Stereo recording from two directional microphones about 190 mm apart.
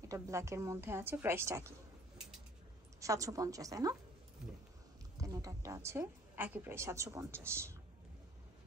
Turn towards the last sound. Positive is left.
turn(degrees=-15)  # may be behind; listen again after turning